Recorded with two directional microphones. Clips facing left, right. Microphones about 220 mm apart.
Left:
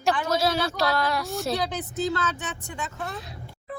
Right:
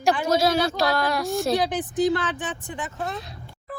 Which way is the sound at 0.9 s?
40° right (ahead or behind).